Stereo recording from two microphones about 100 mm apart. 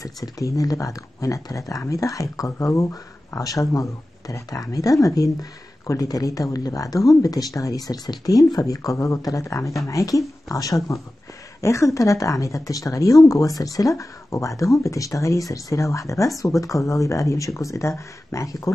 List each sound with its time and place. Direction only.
0.0 s speech: 35° left (ahead or behind)